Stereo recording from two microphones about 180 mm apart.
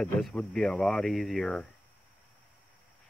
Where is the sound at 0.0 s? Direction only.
5° left (ahead or behind).